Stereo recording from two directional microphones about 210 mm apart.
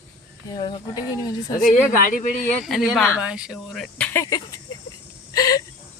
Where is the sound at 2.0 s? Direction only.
40° left (ahead or behind).